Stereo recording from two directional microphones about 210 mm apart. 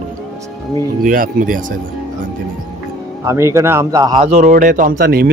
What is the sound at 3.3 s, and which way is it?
Speech, 15° right (ahead or behind).